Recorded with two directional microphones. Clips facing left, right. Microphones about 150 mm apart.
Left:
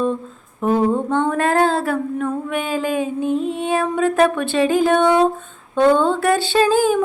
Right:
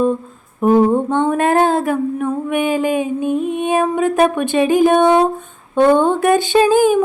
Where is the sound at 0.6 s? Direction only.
15° right (ahead or behind).